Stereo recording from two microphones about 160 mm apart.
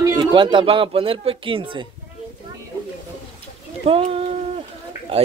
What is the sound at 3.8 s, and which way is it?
Speech, 35° right (ahead or behind).